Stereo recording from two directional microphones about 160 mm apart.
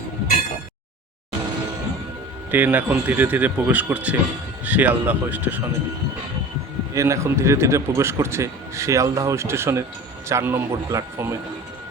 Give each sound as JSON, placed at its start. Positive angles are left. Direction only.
{"t": 2.5, "sound": "a man's voice", "side_deg": -10}
{"t": 6.9, "sound": "a man's voice", "side_deg": -20}